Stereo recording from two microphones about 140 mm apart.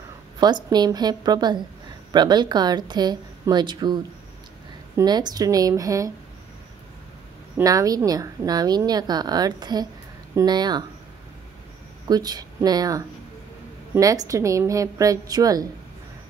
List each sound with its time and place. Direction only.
0.4 s a woman's voice: 30° right (ahead or behind)
7.6 s a woman's voice: 25° right (ahead or behind)
12.1 s a woman's voice: 30° right (ahead or behind)